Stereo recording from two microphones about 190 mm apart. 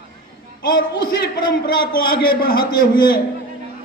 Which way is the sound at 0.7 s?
50° left (ahead or behind).